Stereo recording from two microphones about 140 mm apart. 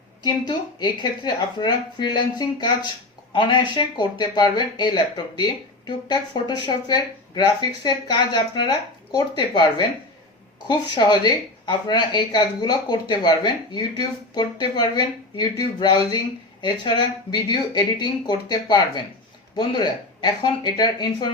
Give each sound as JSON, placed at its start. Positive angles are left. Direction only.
{"t": 0.2, "sound": "speech", "side_deg": 30}